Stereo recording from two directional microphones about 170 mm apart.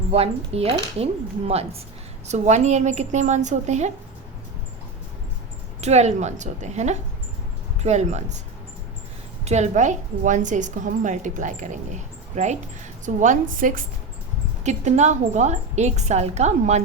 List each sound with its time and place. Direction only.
0.1 s a woman's voice: 35° right (ahead or behind)
5.8 s speech: 40° right (ahead or behind)
9.4 s a woman's voice: 40° right (ahead or behind)
14.6 s a woman's voice: 45° right (ahead or behind)